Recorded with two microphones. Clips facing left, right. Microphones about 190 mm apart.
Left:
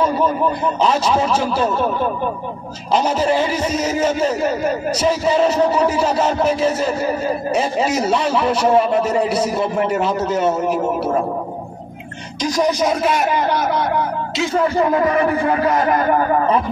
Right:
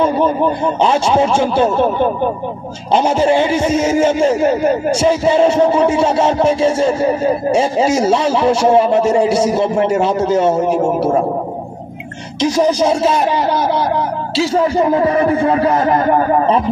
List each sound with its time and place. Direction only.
0.0 s speech: 30° right (ahead or behind)
12.4 s speech: 30° right (ahead or behind)